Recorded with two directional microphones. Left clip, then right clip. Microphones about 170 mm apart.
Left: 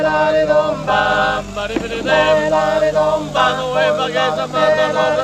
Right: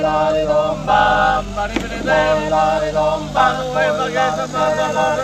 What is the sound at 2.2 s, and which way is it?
Music, 20° left (ahead or behind).